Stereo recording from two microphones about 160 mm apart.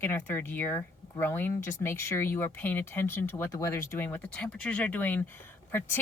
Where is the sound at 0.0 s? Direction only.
10° left (ahead or behind).